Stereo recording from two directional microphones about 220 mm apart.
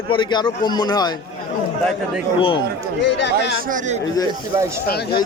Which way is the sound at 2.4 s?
25° left (ahead or behind).